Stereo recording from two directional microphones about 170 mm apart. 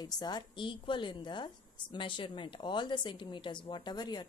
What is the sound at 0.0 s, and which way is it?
A woman's voice, 25° left (ahead or behind).